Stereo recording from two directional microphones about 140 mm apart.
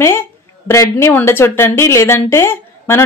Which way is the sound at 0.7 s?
20° left (ahead or behind).